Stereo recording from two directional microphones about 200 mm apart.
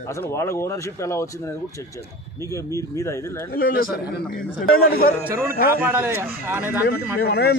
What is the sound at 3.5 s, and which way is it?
A man's voice, 45° left (ahead or behind).